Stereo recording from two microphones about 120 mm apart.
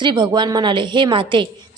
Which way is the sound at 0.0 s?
40° right (ahead or behind).